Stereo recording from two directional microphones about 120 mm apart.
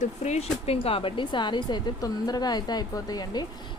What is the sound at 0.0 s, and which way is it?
Speech, 70° left (ahead or behind).